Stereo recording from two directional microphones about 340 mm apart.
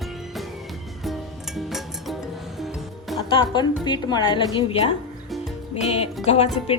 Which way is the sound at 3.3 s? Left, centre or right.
Centre.